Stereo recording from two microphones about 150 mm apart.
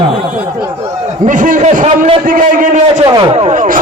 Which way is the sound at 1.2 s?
60° right (ahead or behind).